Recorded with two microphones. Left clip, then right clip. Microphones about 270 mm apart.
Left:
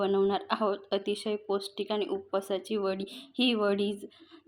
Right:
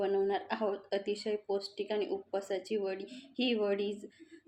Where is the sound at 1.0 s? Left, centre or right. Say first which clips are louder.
Left 3 dB; centre.